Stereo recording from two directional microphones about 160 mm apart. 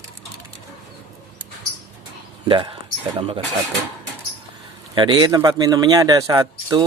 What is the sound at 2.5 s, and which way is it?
Speech, 30° right (ahead or behind).